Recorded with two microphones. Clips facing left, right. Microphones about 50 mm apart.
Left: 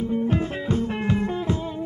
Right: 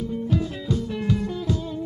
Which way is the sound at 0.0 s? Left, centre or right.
Left.